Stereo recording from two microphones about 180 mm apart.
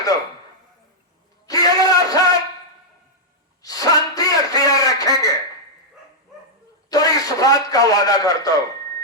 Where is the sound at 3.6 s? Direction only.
20° left (ahead or behind).